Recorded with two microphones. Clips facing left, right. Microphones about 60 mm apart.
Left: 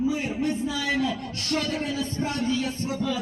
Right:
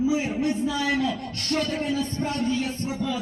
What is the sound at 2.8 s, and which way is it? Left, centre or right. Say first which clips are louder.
Speech: even; centre.